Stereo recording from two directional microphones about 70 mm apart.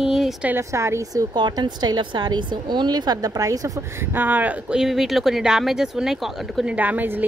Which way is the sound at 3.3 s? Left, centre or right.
Right.